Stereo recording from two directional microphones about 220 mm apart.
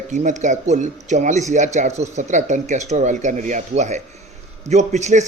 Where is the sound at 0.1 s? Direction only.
35° right (ahead or behind).